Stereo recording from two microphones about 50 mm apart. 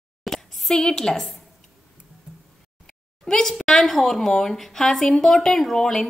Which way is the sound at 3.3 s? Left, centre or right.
Centre.